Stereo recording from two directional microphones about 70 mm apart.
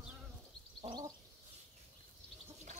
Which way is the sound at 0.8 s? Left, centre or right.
Right.